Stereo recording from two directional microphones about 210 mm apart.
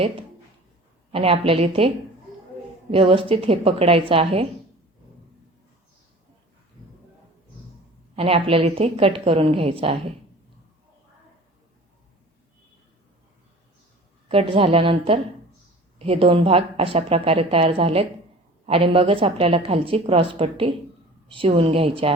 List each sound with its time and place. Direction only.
1.1 s a woman's voice: 25° right (ahead or behind)
2.9 s a woman's voice: 25° right (ahead or behind)
8.1 s a woman's voice: 25° right (ahead or behind)
14.3 s a woman's voice: 25° right (ahead or behind)